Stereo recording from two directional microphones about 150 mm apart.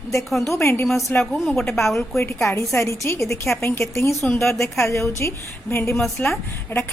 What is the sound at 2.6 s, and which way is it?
A woman's voice, 20° left (ahead or behind).